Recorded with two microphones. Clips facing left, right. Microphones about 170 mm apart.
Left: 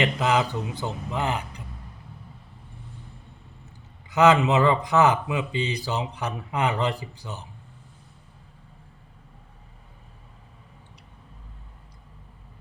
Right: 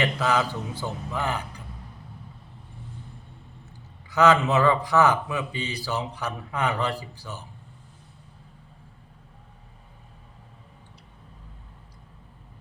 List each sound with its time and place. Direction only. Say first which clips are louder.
0.0 s speech: left 1 dB; 20° left (ahead or behind)
4.1 s speech: left 1 dB; 20° left (ahead or behind)